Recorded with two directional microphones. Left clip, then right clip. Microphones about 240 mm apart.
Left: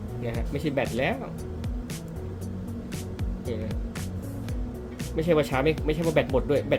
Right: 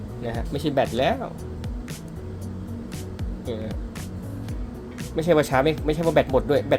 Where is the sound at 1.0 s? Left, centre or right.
Centre.